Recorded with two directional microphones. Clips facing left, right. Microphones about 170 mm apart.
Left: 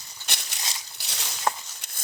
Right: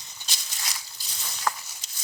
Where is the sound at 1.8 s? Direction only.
60° left (ahead or behind).